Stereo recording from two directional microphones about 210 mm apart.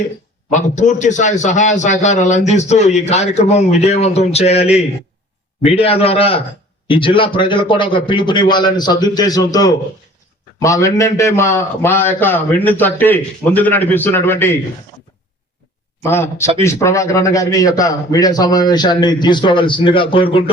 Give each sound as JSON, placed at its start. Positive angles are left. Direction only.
{"t": 0.5, "sound": "a man's voice", "side_deg": 35}
{"t": 16.0, "sound": "a man's voice", "side_deg": 10}